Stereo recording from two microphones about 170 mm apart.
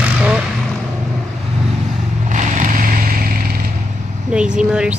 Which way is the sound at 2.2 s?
45° right (ahead or behind).